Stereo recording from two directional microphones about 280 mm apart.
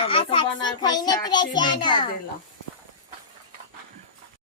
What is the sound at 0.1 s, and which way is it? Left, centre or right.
A child's voice, centre.